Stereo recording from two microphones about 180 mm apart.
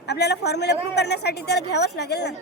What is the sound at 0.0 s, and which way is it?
A woman's voice, 65° left (ahead or behind).